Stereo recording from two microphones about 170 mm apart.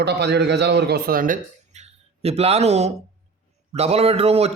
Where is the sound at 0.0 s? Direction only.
75° right (ahead or behind).